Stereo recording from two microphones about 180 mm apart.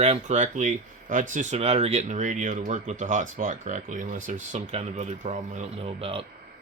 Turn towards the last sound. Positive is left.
turn(degrees=-35)  # may be behind; listen again after turning